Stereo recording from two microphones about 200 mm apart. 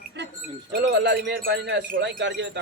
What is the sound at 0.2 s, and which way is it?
Livestock, 60° right (ahead or behind).